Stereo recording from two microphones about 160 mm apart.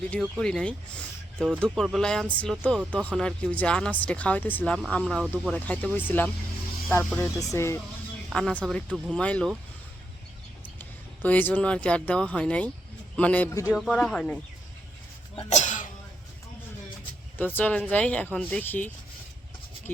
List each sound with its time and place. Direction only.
0.1 s speech: 5° left (ahead or behind)
8.3 s speech: 5° left (ahead or behind)
10.8 s speech: 10° left (ahead or behind)
13.5 s speech: 20° left (ahead or behind)
13.7 s speech: 5° left (ahead or behind)
15.4 s cough: 45° left (ahead or behind)
17.3 s speech: 10° left (ahead or behind)